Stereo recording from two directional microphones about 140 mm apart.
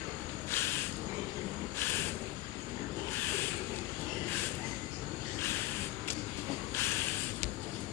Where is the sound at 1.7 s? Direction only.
15° left (ahead or behind).